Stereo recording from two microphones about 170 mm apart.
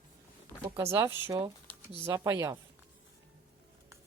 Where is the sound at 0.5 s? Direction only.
25° left (ahead or behind).